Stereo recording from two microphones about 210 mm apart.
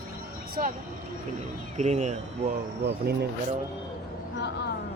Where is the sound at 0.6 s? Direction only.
40° right (ahead or behind).